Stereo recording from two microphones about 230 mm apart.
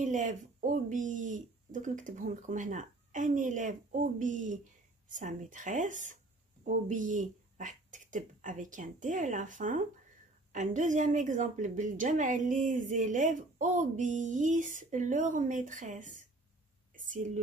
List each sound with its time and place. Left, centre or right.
0.0 s a woman's voice: right